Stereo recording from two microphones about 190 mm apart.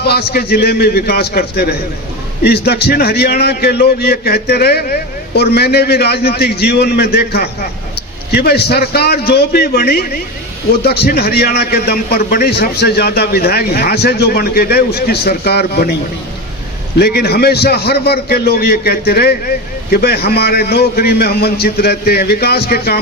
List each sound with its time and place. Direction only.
0.0 s a man's voice: 55° left (ahead or behind)
17.0 s a man's voice: 55° left (ahead or behind)